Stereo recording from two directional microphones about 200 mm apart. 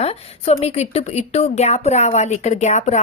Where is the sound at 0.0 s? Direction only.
30° left (ahead or behind).